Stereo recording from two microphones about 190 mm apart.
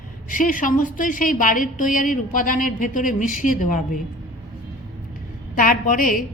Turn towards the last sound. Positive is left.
turn(degrees=45)  # may be behind; listen again after turning